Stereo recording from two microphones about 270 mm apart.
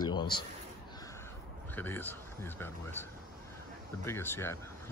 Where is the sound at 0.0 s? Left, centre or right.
Centre.